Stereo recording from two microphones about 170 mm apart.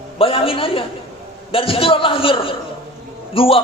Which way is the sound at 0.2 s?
35° left (ahead or behind).